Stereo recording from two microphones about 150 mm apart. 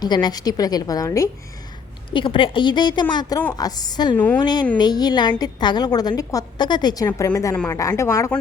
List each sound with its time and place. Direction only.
0.0 s a woman's voice: 25° left (ahead or behind)
2.0 s a woman's voice: 35° left (ahead or behind)